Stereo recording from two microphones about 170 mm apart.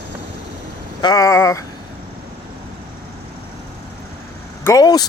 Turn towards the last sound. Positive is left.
turn(degrees=20)  # may be behind; listen again after turning